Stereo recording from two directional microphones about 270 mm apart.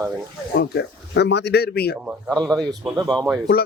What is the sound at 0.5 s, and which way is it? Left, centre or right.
Speech, left.